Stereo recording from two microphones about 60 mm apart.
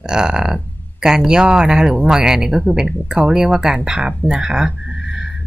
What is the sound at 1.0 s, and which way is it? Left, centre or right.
Speech, centre.